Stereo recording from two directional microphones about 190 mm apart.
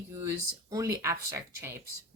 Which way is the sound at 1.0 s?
15° right (ahead or behind).